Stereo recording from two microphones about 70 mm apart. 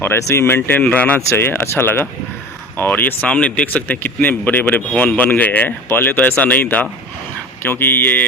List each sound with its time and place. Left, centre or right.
0.2 s speech: left
0.4 s speech: left
1.3 s speech: left
2.7 s speech: left